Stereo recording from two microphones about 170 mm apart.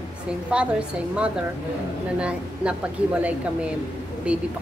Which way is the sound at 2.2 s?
5° right (ahead or behind).